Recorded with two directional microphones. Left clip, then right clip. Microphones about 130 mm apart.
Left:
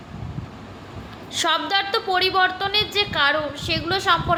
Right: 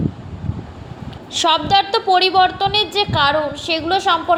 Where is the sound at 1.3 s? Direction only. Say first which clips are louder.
Right 6 dB; 30° right (ahead or behind).